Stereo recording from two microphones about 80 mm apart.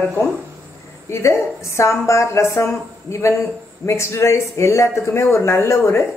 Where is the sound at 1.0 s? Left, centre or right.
Left.